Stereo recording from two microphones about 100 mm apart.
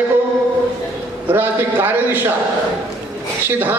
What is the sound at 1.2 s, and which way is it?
Speech, 20° right (ahead or behind).